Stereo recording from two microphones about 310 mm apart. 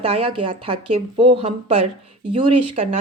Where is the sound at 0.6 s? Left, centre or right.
Centre.